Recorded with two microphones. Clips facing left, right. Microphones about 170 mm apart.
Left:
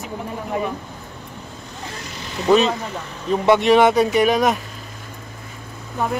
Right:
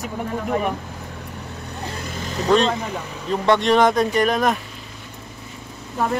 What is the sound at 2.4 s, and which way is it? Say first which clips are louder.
Speech: left 2 dB; 5° left (ahead or behind).